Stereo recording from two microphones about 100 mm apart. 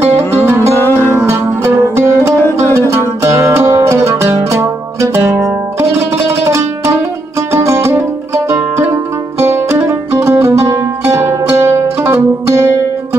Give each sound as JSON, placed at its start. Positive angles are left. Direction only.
{"t": 0.5, "sound": "music", "side_deg": -25}
{"t": 0.7, "sound": "music", "side_deg": 25}
{"t": 1.0, "sound": "music", "side_deg": -25}